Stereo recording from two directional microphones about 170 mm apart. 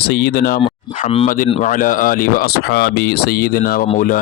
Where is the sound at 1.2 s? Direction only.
55° left (ahead or behind).